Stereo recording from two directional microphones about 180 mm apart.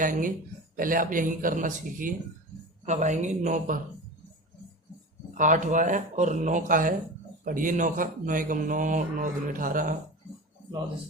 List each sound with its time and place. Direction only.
0.0 s speech: 45° right (ahead or behind)
5.4 s speech: 45° right (ahead or behind)